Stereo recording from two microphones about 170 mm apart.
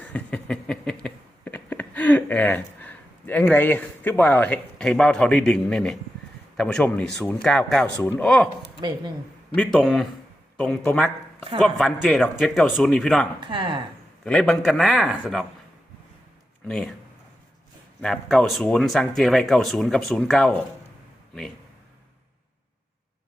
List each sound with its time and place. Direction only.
0.0 s a sound: 10° left (ahead or behind)
6.6 s speech: 5° left (ahead or behind)
9.6 s speech: 5° left (ahead or behind)
13.4 s speech: 25° right (ahead or behind)
14.3 s speech: 5° left (ahead or behind)
16.6 s speech: centre (ahead or behind)
18.0 s speech: centre (ahead or behind)